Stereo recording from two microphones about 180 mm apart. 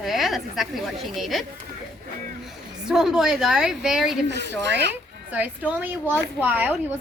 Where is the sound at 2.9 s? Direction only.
Centre (ahead or behind).